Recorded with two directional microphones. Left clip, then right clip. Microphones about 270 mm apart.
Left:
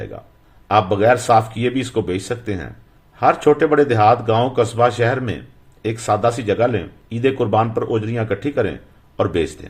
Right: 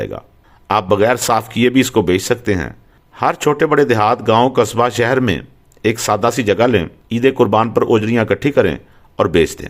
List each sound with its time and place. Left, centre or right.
0.0 s speech: right